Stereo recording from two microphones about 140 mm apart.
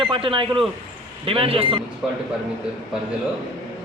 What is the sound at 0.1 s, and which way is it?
A man's voice, 40° right (ahead or behind).